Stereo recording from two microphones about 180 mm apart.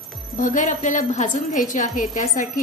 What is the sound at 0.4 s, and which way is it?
A woman's voice, 45° left (ahead or behind).